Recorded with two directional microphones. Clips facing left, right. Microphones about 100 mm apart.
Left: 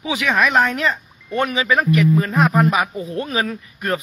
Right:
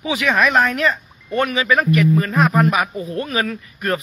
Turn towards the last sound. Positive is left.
turn(degrees=20)  # may be behind; listen again after turning